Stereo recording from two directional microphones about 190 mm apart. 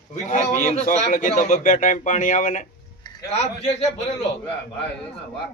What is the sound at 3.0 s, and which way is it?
A man's voice, 25° left (ahead or behind).